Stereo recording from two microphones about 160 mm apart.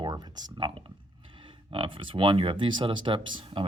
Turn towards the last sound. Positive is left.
turn(degrees=-35)  # may be behind; listen again after turning